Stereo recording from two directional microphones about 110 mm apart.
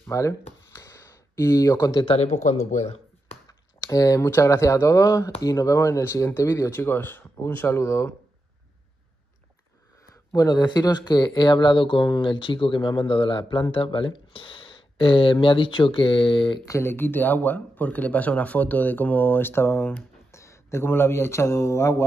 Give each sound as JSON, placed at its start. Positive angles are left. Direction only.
{"t": 0.0, "sound": "speech", "side_deg": 30}
{"t": 0.7, "sound": "a sound", "side_deg": 25}
{"t": 2.1, "sound": "speech", "side_deg": 85}
{"t": 2.7, "sound": "a sound", "side_deg": 80}
{"t": 3.4, "sound": "speech", "side_deg": 30}
{"t": 10.3, "sound": "speech", "side_deg": 40}
{"t": 16.6, "sound": "speech", "side_deg": 25}